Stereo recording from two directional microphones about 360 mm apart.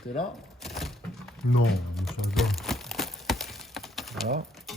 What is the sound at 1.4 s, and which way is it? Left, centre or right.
Speech, left.